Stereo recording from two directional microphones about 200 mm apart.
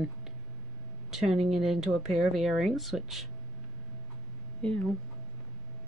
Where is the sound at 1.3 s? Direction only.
30° right (ahead or behind).